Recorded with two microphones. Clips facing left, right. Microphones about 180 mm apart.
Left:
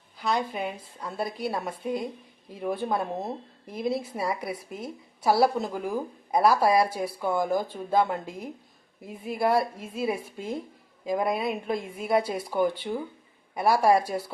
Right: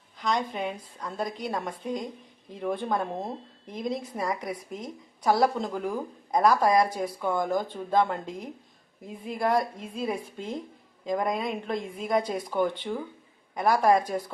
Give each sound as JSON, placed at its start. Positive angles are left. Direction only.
{"t": 0.2, "sound": "speech", "side_deg": 5}